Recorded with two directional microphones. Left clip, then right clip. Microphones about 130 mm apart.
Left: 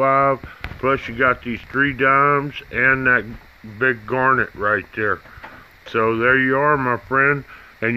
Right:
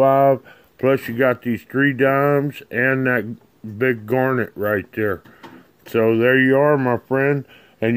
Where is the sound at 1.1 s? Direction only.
40° right (ahead or behind).